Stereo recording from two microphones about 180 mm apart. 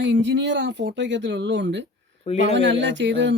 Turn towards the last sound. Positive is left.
turn(degrees=-85)